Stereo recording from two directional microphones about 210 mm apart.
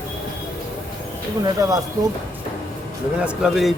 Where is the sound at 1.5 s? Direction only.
15° right (ahead or behind).